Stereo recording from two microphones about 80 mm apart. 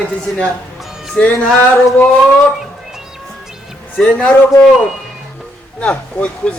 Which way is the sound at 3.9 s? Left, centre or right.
Centre.